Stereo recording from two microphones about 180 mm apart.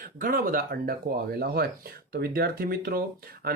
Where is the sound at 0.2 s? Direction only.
55° right (ahead or behind).